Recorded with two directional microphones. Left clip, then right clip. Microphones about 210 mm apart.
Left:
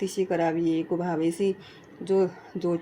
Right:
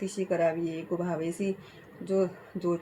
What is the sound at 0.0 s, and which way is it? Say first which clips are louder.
Speech: left 2 dB; 45° left (ahead or behind).